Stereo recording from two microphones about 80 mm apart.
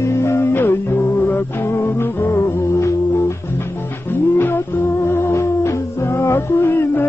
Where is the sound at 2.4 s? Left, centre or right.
Left.